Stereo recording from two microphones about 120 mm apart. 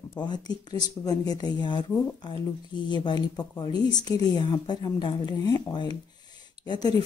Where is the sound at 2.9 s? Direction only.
35° left (ahead or behind).